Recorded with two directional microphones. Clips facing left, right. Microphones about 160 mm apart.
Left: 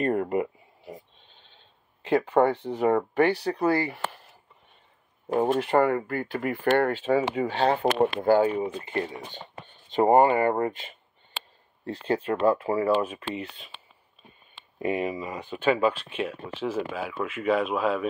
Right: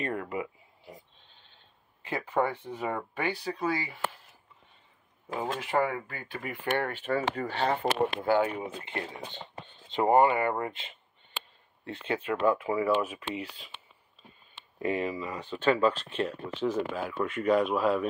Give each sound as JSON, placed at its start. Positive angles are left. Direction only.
{"t": 0.0, "sound": "a sound", "side_deg": 50}
{"t": 2.0, "sound": "speech", "side_deg": 65}
{"t": 5.3, "sound": "speech", "side_deg": 55}
{"t": 8.2, "sound": "speech", "side_deg": 40}
{"t": 11.8, "sound": "speech", "side_deg": 35}
{"t": 14.8, "sound": "speech", "side_deg": 15}